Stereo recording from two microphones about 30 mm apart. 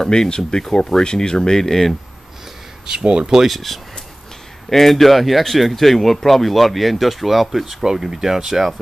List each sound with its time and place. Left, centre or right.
0.0 s speech: left
2.9 s speech: right
3.4 s speech: centre
7.8 s speech: centre